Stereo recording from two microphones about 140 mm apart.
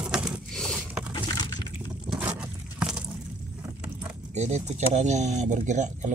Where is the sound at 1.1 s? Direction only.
30° left (ahead or behind).